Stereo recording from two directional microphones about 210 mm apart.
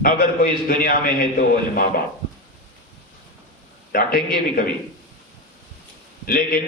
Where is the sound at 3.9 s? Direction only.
45° left (ahead or behind).